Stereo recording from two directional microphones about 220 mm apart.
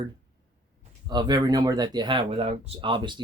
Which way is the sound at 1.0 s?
20° right (ahead or behind).